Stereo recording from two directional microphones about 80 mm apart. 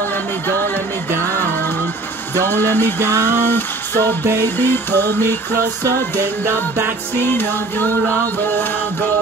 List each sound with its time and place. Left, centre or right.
2.4 s music: left
3.4 s a sound: left
4.6 s music: left
7.2 s music: left